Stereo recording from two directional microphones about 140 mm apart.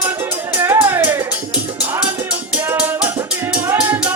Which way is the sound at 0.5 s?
15° right (ahead or behind).